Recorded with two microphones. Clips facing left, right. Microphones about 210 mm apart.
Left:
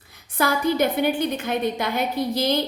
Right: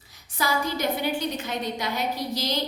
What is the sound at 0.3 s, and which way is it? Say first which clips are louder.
A woman's voice: left 6 dB; 55° left (ahead or behind).